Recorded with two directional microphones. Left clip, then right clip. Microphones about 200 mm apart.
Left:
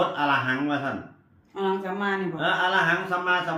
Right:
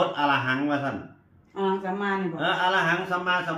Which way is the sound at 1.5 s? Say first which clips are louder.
Even; 25° left (ahead or behind).